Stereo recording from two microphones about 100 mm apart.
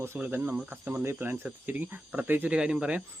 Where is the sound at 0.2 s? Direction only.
20° right (ahead or behind).